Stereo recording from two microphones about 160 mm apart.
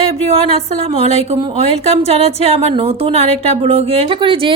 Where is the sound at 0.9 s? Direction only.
40° right (ahead or behind).